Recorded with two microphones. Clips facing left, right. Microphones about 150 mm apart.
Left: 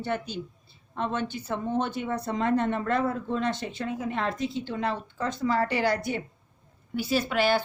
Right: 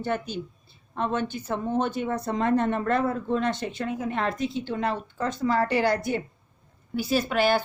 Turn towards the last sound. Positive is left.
turn(degrees=-45)  # may be behind; listen again after turning